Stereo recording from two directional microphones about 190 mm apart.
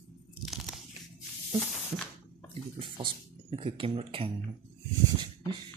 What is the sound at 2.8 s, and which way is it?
Speech, 30° right (ahead or behind).